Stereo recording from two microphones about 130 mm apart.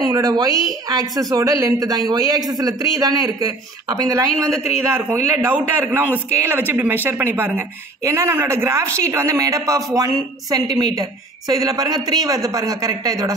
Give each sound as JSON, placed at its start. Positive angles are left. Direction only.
{"t": 0.0, "sound": "a woman's voice", "side_deg": -30}